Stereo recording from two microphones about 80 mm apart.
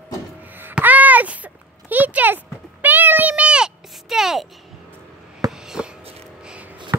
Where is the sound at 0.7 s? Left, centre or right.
Centre.